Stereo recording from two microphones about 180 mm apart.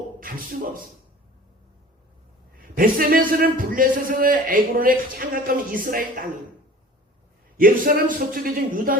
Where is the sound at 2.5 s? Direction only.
50° right (ahead or behind).